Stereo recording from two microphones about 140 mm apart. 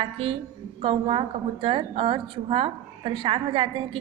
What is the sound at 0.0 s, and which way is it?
A woman's voice, 40° right (ahead or behind).